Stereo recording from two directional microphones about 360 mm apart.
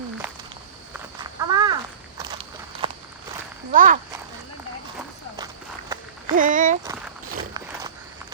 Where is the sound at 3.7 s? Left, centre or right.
Right.